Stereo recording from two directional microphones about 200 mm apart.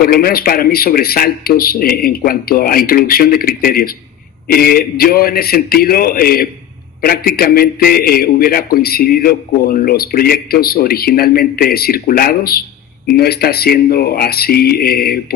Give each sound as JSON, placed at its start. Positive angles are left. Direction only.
{"t": 0.0, "sound": "a man's voice", "side_deg": 50}